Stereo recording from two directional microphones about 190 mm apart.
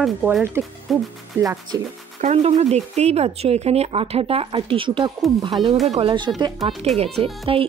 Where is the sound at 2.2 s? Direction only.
35° right (ahead or behind); by 5.5 s 20° right (ahead or behind).